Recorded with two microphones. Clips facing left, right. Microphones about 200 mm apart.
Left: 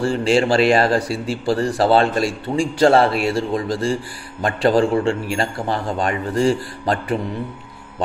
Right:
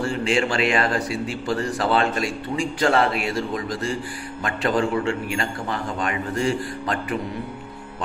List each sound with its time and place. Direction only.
0.0 s a man's voice: 35° left (ahead or behind)